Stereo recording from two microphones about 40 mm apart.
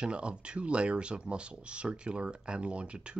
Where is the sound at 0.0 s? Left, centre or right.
Right.